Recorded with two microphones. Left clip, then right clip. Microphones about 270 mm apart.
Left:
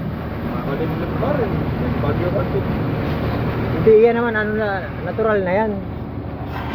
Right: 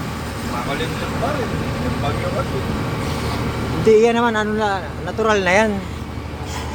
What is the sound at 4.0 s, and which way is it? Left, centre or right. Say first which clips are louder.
Speech: left 1 dB; centre.